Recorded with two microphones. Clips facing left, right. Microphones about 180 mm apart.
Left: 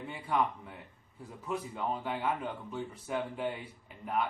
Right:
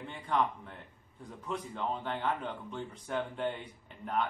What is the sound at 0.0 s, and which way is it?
A man's voice, 5° left (ahead or behind).